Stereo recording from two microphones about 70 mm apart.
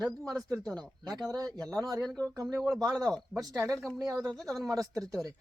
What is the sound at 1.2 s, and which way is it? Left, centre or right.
Speech, right.